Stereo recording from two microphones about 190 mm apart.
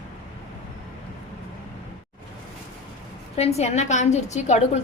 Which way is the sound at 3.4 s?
35° left (ahead or behind).